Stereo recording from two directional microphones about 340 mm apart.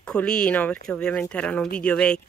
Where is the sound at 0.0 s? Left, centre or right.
Centre.